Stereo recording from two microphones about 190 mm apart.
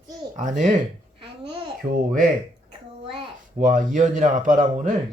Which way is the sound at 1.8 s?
20° right (ahead or behind).